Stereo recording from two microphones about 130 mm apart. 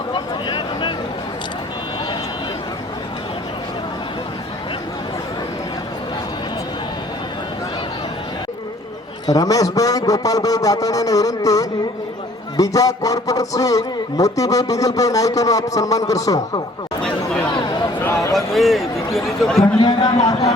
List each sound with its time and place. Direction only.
0.1 s a sound: 40° left (ahead or behind)
9.2 s a man's voice: 30° left (ahead or behind)
17.5 s a sound: 35° left (ahead or behind)
18.0 s speech: 20° left (ahead or behind)
18.3 s speech: centre (ahead or behind)
19.8 s a man's voice: 30° left (ahead or behind)